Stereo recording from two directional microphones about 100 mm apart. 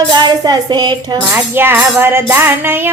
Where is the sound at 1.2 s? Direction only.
20° right (ahead or behind).